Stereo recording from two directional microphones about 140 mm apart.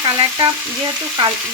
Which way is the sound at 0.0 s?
30° right (ahead or behind).